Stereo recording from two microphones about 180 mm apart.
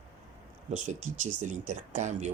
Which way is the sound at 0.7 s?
40° right (ahead or behind).